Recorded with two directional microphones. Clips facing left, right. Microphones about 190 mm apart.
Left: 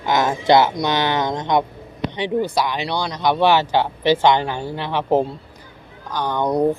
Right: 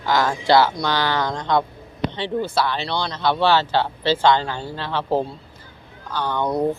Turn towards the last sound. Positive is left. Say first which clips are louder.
# left 2 dB
turn(degrees=15)  # may be behind; listen again after turning